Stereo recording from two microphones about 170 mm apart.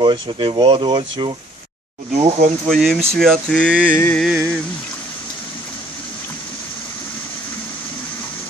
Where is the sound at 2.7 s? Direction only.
Centre (ahead or behind).